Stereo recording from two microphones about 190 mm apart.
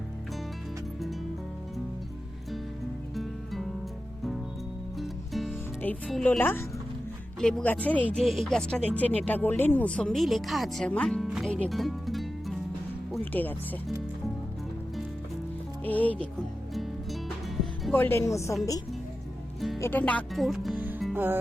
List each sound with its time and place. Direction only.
3.2 s music: centre (ahead or behind)
4.9 s music: centre (ahead or behind)
7.3 s speech: 5° left (ahead or behind)
15.8 s speech: 10° left (ahead or behind)
16.7 s music: centre (ahead or behind)
18.0 s speech: 15° left (ahead or behind)
19.8 s speech: 10° left (ahead or behind); by 21.3 s 10° right (ahead or behind)